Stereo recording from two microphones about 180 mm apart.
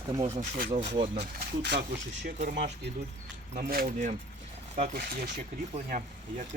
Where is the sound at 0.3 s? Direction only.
50° right (ahead or behind).